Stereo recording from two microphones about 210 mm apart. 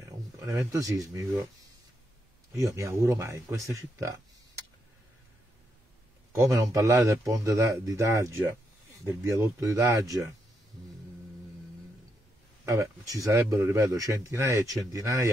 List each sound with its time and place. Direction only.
0.4 s speech: 15° right (ahead or behind)
2.5 s speech: 15° right (ahead or behind)
6.3 s speech: 15° right (ahead or behind)
12.6 s speech: 15° right (ahead or behind)